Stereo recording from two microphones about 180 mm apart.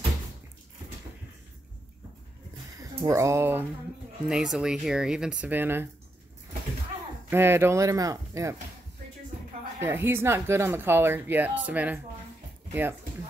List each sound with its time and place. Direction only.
2.8 s speech: 15° right (ahead or behind)
7.2 s speech: 10° right (ahead or behind)
9.8 s speech: 10° right (ahead or behind)